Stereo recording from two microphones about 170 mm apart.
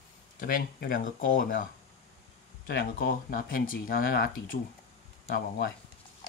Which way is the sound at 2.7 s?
60° left (ahead or behind).